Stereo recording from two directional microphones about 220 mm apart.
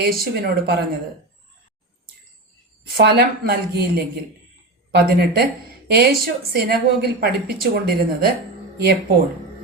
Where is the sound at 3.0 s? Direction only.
45° right (ahead or behind).